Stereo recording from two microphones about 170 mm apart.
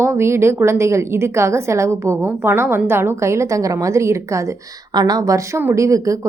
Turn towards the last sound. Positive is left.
turn(degrees=-20)  # may be behind; listen again after turning